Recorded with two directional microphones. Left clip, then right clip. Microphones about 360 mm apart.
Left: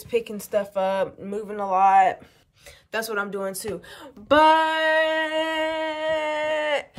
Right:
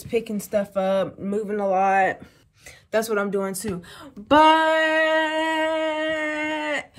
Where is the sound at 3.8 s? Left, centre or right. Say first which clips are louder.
Left 3 dB; centre.